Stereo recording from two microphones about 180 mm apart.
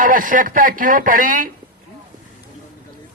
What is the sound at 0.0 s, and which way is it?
A man's voice, 45° right (ahead or behind).